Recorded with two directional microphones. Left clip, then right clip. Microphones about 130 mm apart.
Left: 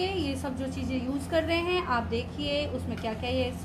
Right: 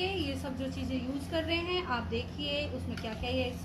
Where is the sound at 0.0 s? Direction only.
30° left (ahead or behind).